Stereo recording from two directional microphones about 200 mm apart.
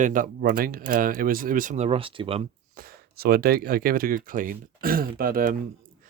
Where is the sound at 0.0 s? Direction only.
45° right (ahead or behind); by 2.4 s 25° right (ahead or behind).